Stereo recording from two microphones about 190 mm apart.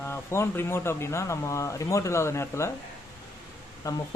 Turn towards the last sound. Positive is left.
turn(degrees=20)  # may be behind; listen again after turning